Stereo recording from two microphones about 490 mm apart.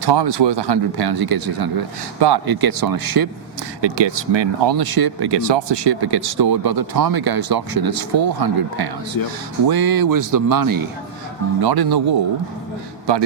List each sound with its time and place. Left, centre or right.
0.0 s speech: right
3.8 s speech: right